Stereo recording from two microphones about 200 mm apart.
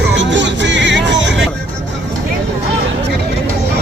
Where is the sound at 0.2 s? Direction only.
65° right (ahead or behind).